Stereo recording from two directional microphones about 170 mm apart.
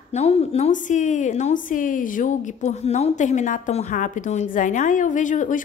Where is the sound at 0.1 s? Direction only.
40° left (ahead or behind).